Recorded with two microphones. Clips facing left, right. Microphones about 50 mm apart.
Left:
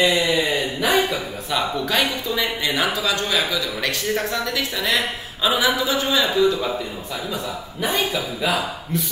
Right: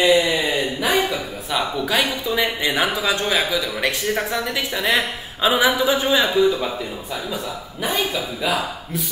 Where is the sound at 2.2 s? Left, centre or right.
Centre.